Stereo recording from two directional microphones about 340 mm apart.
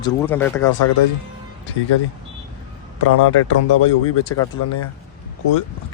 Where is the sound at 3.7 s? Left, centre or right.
Left.